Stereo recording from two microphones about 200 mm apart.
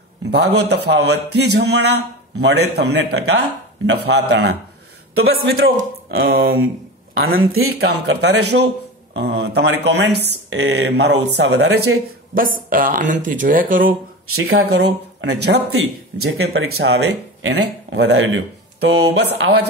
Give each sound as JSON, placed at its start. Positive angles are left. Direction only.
{"t": 0.3, "sound": "a man's voice", "side_deg": -55}
{"t": 5.1, "sound": "speech", "side_deg": -90}
{"t": 6.2, "sound": "speech", "side_deg": -50}
{"t": 7.5, "sound": "speech", "side_deg": -90}
{"t": 8.0, "sound": "a man's voice", "side_deg": -60}
{"t": 12.4, "sound": "speech", "side_deg": -45}
{"t": 14.6, "sound": "a man's voice", "side_deg": -55}
{"t": 16.2, "sound": "speech", "side_deg": -90}
{"t": 16.8, "sound": "a man's voice", "side_deg": -65}